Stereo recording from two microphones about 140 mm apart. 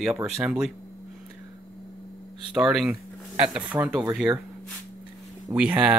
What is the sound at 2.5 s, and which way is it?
Speech, 5° right (ahead or behind).